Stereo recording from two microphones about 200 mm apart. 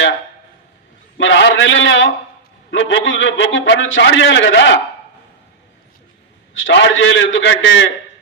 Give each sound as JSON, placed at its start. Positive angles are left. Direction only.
{"t": 1.2, "sound": "a man's voice", "side_deg": 65}
{"t": 6.5, "sound": "a man's voice", "side_deg": 75}